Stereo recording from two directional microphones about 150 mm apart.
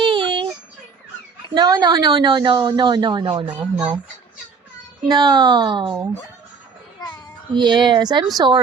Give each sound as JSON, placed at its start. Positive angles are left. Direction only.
{"t": 0.0, "sound": "a sound", "side_deg": -30}
{"t": 1.5, "sound": "a woman's voice", "side_deg": -25}
{"t": 5.0, "sound": "a woman's voice", "side_deg": -30}
{"t": 7.5, "sound": "a woman's voice", "side_deg": -30}